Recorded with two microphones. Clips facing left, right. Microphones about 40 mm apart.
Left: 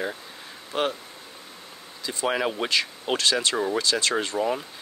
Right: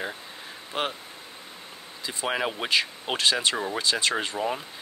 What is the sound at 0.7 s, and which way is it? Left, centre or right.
Speech, centre.